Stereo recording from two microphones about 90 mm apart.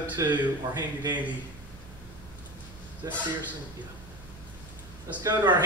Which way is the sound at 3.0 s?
35° right (ahead or behind).